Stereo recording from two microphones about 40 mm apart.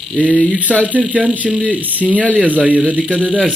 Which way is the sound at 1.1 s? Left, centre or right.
Right.